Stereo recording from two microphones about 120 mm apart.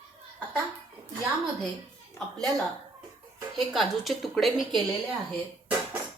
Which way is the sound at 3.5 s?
Centre (ahead or behind).